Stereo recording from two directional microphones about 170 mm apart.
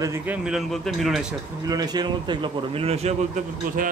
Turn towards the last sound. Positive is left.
turn(degrees=-50)  # may be behind; listen again after turning